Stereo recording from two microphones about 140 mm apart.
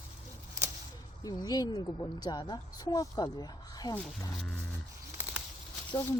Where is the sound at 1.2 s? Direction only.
30° left (ahead or behind).